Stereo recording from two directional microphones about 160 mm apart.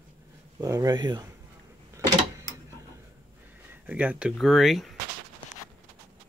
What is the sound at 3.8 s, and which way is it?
Speech, 10° right (ahead or behind).